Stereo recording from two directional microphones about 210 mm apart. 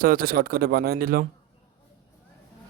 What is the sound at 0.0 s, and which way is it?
Speech, 45° right (ahead or behind).